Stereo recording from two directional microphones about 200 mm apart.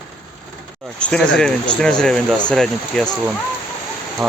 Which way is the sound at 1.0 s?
5° left (ahead or behind).